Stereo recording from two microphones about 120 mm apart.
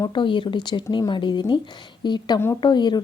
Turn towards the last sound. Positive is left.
turn(degrees=40)  # may be behind; listen again after turning